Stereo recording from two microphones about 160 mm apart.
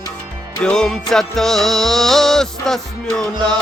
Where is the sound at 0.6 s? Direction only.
5° left (ahead or behind).